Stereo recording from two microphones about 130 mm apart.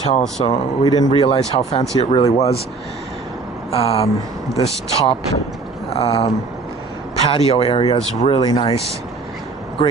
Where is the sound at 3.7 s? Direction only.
50° left (ahead or behind).